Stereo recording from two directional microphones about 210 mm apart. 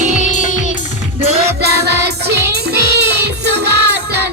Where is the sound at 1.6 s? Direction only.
50° right (ahead or behind).